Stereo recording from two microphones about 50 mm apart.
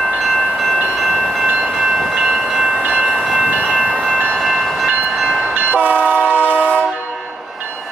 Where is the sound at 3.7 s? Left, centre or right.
Centre.